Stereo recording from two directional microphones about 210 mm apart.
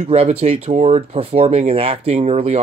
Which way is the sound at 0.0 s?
30° right (ahead or behind).